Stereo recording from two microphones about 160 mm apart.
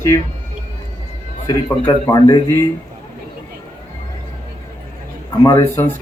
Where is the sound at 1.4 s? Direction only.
20° left (ahead or behind).